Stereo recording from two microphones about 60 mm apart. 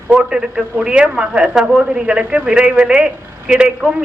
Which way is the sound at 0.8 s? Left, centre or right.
Centre.